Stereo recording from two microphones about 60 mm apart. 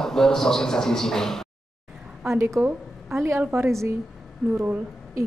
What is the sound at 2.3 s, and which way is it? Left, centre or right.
A woman's voice, right.